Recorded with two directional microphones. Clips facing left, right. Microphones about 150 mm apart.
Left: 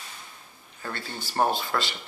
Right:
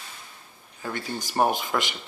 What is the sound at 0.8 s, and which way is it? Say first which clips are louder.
Speech: right 4 dB; 15° right (ahead or behind).